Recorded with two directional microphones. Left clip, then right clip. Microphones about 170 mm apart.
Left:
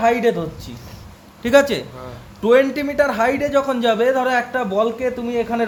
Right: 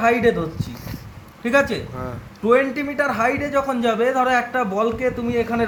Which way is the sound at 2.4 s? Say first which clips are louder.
Left 3 dB; 30° left (ahead or behind).